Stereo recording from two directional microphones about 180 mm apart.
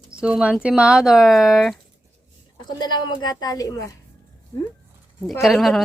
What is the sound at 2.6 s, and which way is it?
Speech, 25° left (ahead or behind).